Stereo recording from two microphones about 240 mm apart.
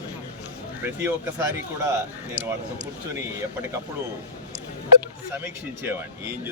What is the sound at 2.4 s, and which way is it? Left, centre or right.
Speech, right.